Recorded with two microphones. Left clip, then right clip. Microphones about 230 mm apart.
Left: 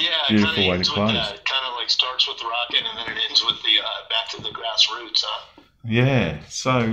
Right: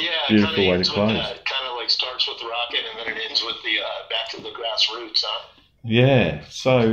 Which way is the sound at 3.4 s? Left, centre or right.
Left.